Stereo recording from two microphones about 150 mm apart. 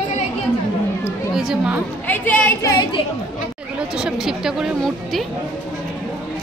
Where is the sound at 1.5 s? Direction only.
10° right (ahead or behind).